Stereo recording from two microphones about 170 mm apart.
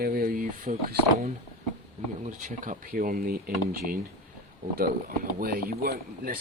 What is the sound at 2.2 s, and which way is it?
Speech, 50° right (ahead or behind).